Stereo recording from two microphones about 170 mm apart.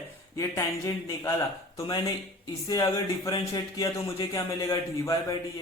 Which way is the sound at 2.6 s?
20° left (ahead or behind).